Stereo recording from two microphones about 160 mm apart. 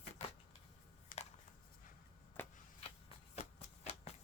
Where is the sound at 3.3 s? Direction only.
40° left (ahead or behind).